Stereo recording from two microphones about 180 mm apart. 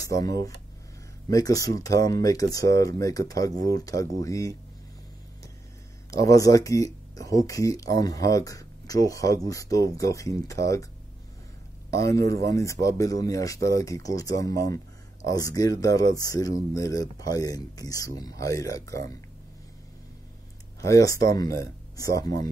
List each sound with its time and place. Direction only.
0.0 s speech: 20° left (ahead or behind)
1.3 s speech: 20° left (ahead or behind)
6.0 s speech: 20° left (ahead or behind)
11.9 s speech: 15° left (ahead or behind)
20.8 s speech: 15° left (ahead or behind)